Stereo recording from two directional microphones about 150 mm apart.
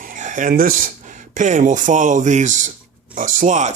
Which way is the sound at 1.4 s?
55° right (ahead or behind).